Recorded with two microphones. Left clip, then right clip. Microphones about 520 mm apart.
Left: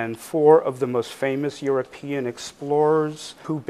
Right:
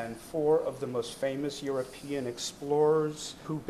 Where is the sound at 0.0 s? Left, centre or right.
Left.